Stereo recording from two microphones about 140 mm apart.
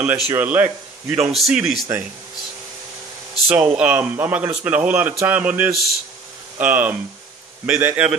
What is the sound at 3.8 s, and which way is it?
Speech, 15° right (ahead or behind).